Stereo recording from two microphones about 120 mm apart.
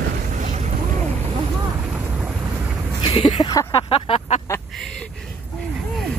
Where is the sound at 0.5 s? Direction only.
70° right (ahead or behind).